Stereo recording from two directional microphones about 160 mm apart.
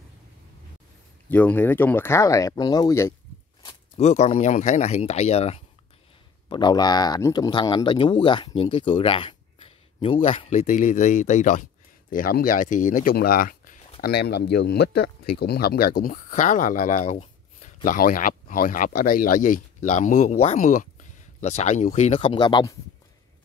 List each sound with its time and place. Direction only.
1.3 s speech: 10° left (ahead or behind)
3.6 s speech: 40° left (ahead or behind)
6.5 s speech: 25° left (ahead or behind); by 11.6 s 50° left (ahead or behind)
12.1 s speech: 60° left (ahead or behind)
14.0 s speech: 85° left; by 17.6 s 50° left (ahead or behind)
17.8 s speech: 60° left (ahead or behind); by 22.8 s 30° left (ahead or behind)